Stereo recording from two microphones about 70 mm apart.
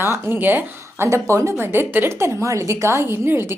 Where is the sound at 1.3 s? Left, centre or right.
Right.